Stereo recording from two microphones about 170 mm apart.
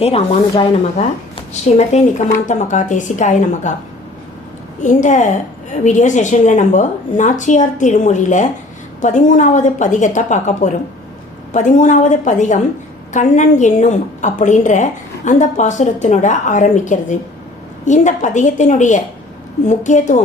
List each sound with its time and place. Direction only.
0.0 s a woman's voice: 35° left (ahead or behind)
4.8 s a woman's voice: 45° left (ahead or behind)